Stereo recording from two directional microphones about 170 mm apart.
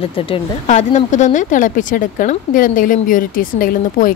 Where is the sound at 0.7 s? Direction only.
45° left (ahead or behind).